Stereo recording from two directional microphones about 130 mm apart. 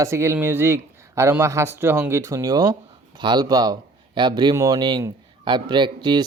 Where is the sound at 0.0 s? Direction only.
20° right (ahead or behind).